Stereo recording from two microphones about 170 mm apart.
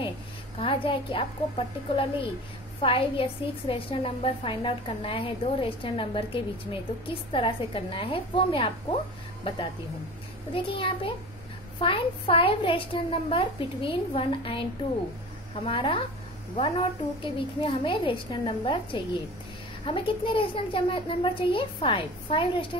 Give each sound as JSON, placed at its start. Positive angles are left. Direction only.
{"t": 0.6, "sound": "a woman's voice", "side_deg": 30}
{"t": 10.5, "sound": "a woman's voice", "side_deg": 30}